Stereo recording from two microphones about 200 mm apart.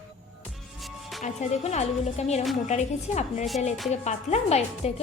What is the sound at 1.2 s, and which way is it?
Music, 35° left (ahead or behind).